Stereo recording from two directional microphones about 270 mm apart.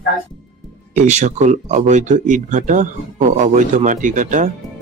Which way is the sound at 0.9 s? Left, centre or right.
Right.